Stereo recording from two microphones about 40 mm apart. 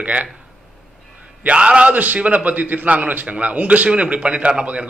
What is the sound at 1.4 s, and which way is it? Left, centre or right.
Speech, right.